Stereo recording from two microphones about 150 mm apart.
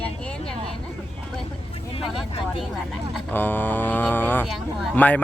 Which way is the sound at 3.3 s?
10° left (ahead or behind).